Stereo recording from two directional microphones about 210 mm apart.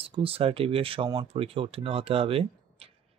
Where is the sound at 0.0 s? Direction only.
25° right (ahead or behind).